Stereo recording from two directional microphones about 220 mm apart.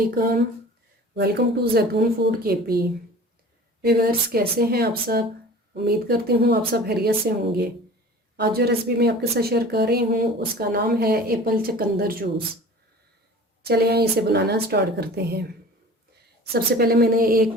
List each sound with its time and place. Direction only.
1.1 s speech: 45° right (ahead or behind)
3.8 s speech: 45° right (ahead or behind)
8.4 s speech: 45° right (ahead or behind)
13.6 s speech: 45° right (ahead or behind)
16.5 s speech: 45° right (ahead or behind)